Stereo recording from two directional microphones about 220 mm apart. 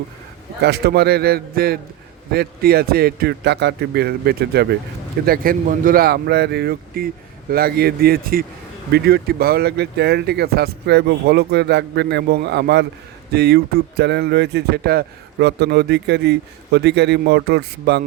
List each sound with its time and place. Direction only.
0.6 s speech: 45° right (ahead or behind)